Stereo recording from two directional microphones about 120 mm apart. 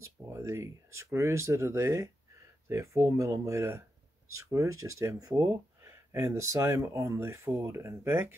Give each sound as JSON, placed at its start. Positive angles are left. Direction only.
{"t": 0.0, "sound": "speech", "side_deg": -25}